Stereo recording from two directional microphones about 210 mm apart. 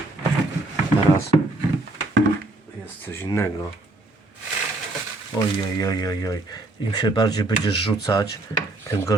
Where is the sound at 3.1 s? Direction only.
10° left (ahead or behind).